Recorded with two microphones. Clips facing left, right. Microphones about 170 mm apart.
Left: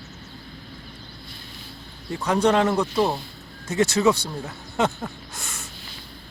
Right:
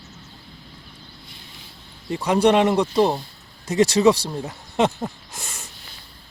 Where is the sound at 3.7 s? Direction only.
35° right (ahead or behind).